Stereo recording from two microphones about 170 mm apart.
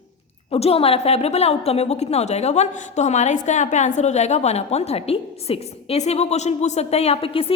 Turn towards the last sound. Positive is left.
turn(degrees=35)  # may be behind; listen again after turning